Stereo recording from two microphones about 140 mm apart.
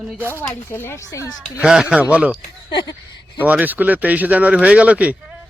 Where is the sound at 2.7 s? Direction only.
30° left (ahead or behind).